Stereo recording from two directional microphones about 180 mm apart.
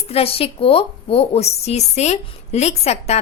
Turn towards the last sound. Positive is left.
turn(degrees=35)  # may be behind; listen again after turning